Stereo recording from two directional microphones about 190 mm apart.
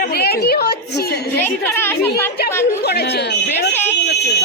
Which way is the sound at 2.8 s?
60° left (ahead or behind).